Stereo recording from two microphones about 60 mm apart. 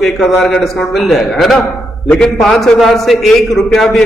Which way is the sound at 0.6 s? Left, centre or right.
Centre.